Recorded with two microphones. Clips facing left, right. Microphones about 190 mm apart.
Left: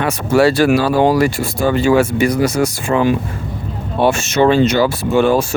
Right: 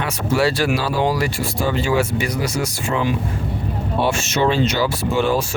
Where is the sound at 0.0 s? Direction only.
50° left (ahead or behind).